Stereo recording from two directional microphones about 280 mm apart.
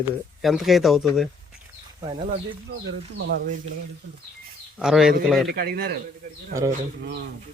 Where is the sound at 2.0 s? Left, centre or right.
Centre.